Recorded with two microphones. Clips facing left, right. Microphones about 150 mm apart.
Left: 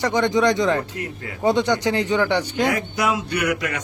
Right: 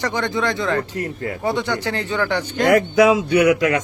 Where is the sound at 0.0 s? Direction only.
15° left (ahead or behind).